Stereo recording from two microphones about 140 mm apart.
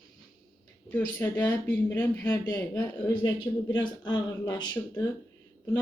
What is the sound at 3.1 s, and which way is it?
Speech, 35° left (ahead or behind).